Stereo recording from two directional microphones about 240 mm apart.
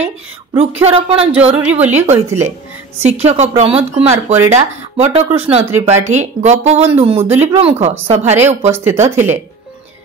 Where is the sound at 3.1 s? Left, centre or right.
Right.